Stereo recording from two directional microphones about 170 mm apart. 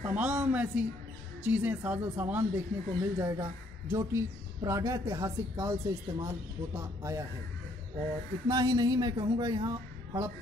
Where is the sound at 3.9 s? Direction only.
15° right (ahead or behind).